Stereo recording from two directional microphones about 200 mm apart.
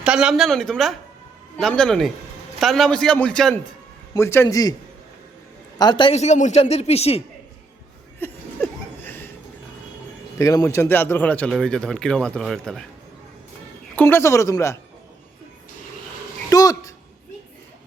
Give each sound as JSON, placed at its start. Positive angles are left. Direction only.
{"t": 0.0, "sound": "speech", "side_deg": -5}
{"t": 5.8, "sound": "a woman's voice", "side_deg": 25}
{"t": 8.2, "sound": "speech", "side_deg": 10}
{"t": 9.0, "sound": "a sound", "side_deg": 10}
{"t": 10.3, "sound": "speech", "side_deg": 15}
{"t": 13.9, "sound": "speech", "side_deg": 10}
{"t": 16.5, "sound": "a sound", "side_deg": 20}